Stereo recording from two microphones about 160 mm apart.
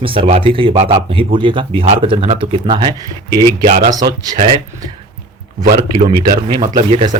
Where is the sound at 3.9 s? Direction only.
25° right (ahead or behind).